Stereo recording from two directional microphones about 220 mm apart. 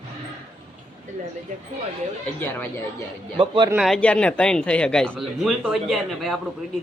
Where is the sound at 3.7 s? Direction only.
Centre (ahead or behind).